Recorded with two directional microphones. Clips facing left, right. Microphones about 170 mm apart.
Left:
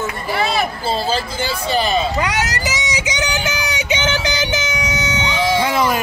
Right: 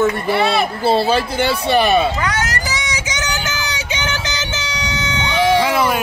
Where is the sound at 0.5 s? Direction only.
65° right (ahead or behind).